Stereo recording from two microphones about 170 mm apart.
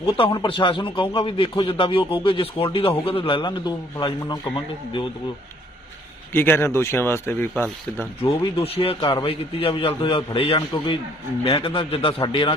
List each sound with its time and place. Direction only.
0.1 s a man's voice: 30° left (ahead or behind)
6.3 s speech: 10° left (ahead or behind)
8.2 s a man's voice: 35° left (ahead or behind)